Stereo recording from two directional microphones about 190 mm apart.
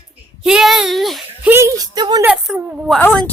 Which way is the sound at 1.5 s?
15° right (ahead or behind).